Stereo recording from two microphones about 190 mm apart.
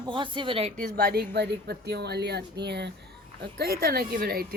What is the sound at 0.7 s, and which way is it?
Speech, 45° right (ahead or behind).